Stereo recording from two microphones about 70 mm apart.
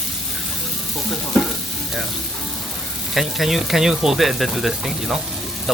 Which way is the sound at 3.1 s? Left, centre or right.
Centre.